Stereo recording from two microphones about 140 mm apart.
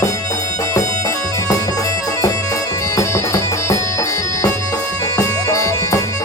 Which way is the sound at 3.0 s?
20° left (ahead or behind).